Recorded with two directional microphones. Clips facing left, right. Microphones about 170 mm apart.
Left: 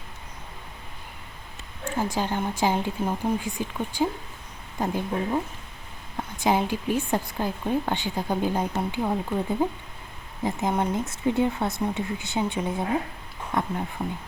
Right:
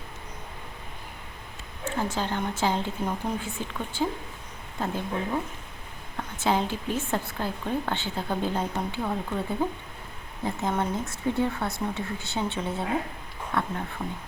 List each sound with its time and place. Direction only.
1.8 s a woman's voice: 15° left (ahead or behind)